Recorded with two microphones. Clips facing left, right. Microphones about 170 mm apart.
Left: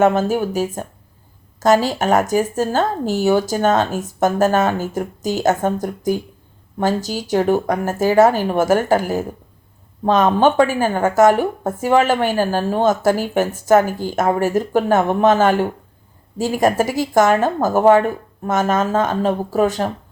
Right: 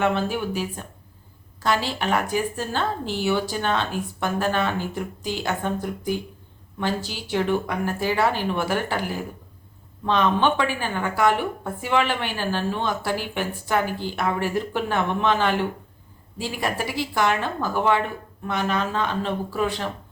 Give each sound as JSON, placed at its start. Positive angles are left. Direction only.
{"t": 0.0, "sound": "speech", "side_deg": 45}